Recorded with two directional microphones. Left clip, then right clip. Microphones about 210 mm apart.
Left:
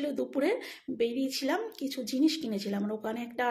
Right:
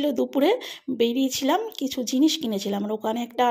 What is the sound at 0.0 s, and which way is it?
Speech, 35° right (ahead or behind).